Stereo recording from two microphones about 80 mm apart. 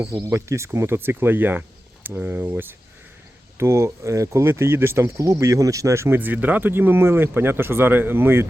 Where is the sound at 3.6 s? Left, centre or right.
Right.